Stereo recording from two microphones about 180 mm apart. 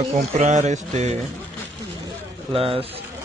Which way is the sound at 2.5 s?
30° right (ahead or behind).